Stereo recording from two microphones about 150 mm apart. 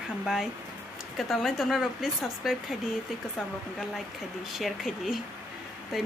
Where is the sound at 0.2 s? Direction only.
5° right (ahead or behind).